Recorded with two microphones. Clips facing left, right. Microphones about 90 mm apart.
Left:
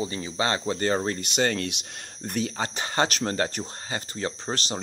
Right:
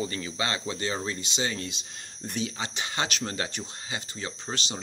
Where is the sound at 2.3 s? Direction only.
50° left (ahead or behind).